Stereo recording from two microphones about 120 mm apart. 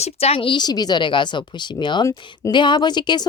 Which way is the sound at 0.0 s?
55° left (ahead or behind).